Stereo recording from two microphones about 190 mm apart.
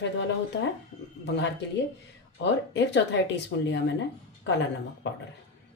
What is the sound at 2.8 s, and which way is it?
Speech, 70° left (ahead or behind).